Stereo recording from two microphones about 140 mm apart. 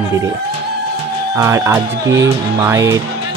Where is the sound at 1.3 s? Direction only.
20° right (ahead or behind).